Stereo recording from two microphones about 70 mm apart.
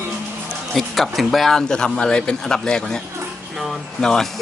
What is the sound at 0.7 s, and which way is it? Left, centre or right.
Speech, centre.